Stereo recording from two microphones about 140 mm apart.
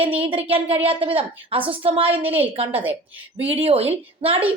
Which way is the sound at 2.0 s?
10° right (ahead or behind).